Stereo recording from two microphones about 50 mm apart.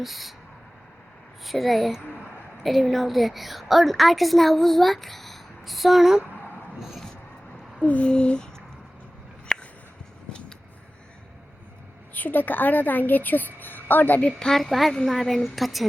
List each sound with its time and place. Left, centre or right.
0.0 s a woman's voice: centre
1.5 s a woman's voice: centre
7.8 s a sound: left
9.5 s a sound: centre
12.1 s a woman's voice: left
14.3 s a woman's voice: centre
14.6 s a woman's voice: centre